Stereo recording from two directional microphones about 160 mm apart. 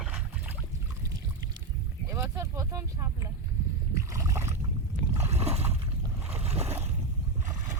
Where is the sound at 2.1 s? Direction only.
15° right (ahead or behind).